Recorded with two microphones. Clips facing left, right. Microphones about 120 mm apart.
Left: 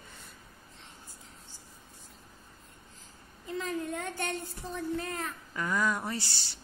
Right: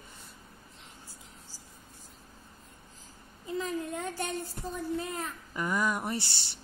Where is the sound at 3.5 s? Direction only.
Centre (ahead or behind).